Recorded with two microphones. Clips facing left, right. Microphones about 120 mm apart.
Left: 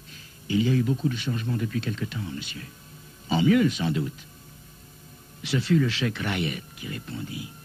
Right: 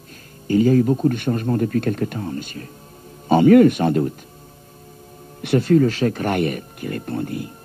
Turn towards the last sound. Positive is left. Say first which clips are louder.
# right 10 dB
turn(degrees=-50)  # may be behind; listen again after turning